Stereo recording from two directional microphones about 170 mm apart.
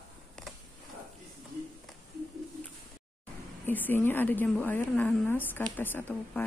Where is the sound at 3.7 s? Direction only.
10° left (ahead or behind).